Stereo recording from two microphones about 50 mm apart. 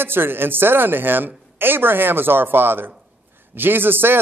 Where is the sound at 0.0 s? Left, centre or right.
Right.